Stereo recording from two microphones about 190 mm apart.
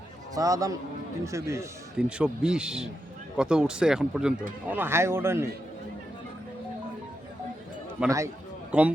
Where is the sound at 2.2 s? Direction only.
5° right (ahead or behind).